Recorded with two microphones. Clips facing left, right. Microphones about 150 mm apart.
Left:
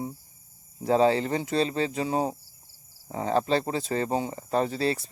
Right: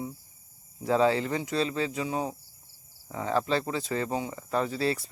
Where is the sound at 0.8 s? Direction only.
25° left (ahead or behind).